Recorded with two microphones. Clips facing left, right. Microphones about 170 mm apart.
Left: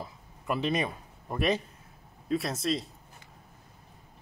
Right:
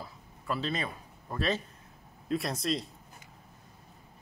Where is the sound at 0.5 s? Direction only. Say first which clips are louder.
Left 4 dB; 15° left (ahead or behind).